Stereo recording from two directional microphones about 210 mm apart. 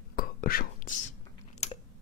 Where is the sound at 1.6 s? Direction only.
30° left (ahead or behind).